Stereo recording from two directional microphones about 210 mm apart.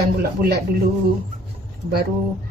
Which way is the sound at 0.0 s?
45° right (ahead or behind).